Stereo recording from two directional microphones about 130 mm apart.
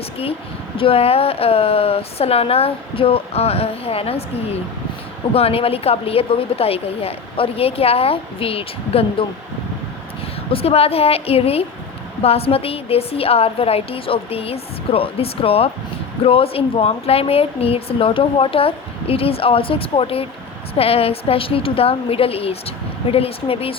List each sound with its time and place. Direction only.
0.8 s speech: 45° left (ahead or behind)
5.3 s speech: 45° left (ahead or behind)
10.5 s speech: 50° left (ahead or behind)